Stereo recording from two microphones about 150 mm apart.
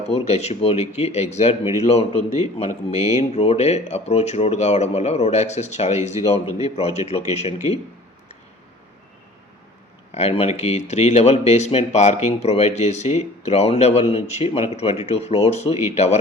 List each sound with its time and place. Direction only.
0.1 s speech: 45° left (ahead or behind)
10.1 s speech: 45° left (ahead or behind)